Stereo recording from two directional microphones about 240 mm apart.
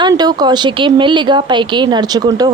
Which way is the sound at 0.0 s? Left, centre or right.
Centre.